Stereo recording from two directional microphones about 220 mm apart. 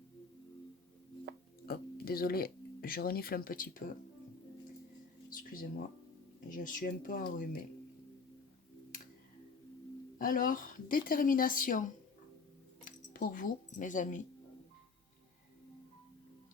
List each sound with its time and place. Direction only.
1.6 s speech: 45° left (ahead or behind)
5.3 s speech: 40° left (ahead or behind)
10.2 s speech: 40° left (ahead or behind)
12.8 s chink: 40° left (ahead or behind)